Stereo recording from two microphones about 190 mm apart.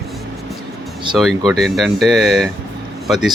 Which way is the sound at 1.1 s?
Centre (ahead or behind).